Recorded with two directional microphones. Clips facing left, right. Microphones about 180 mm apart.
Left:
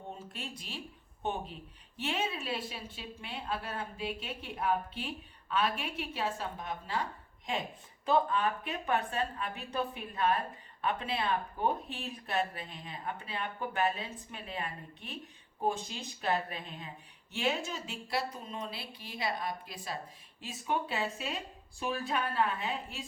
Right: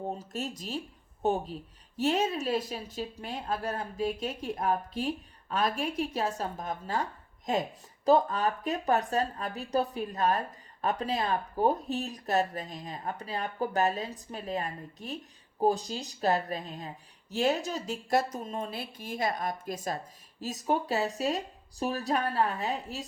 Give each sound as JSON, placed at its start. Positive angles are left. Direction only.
{"t": 0.1, "sound": "a woman's voice", "side_deg": -40}